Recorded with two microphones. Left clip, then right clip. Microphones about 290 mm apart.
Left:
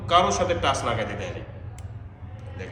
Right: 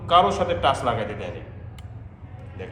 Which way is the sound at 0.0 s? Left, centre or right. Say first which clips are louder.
Right 2 dB; centre.